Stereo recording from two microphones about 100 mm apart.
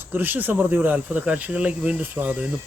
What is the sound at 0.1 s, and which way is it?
Speech, 20° right (ahead or behind).